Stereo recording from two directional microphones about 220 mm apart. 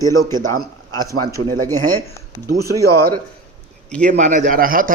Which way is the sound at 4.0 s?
35° right (ahead or behind).